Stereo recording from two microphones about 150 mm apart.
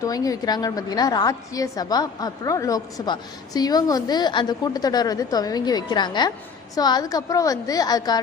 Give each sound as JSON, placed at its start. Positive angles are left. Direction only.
{"t": 0.0, "sound": "a woman's voice", "side_deg": 25}